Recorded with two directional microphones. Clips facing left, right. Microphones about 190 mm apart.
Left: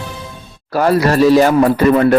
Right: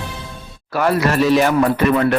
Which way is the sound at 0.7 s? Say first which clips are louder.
Left 4 dB; 35° left (ahead or behind).